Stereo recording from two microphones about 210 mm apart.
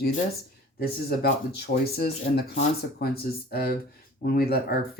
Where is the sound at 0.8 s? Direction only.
50° left (ahead or behind).